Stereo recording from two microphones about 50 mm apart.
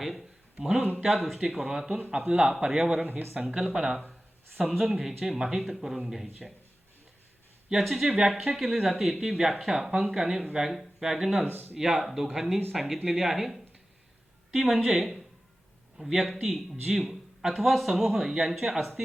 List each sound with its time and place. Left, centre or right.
0.0 s speech: centre; by 2.6 s right
2.6 s speech: centre
3.0 s speech: right
3.8 s speech: centre
7.7 s speech: centre
11.4 s speech: right
11.7 s speech: centre
16.4 s speech: centre